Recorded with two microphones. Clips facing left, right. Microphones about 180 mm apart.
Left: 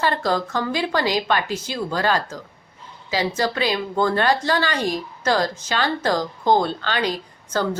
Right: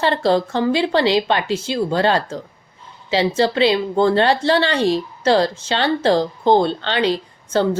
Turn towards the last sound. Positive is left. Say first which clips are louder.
# right 5 dB
turn(degrees=-25)  # may be behind; listen again after turning